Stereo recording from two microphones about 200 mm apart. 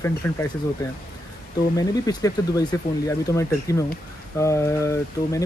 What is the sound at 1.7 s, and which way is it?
Speech, 20° left (ahead or behind).